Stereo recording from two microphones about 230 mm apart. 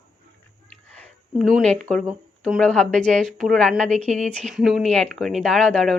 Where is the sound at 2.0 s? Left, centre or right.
Centre.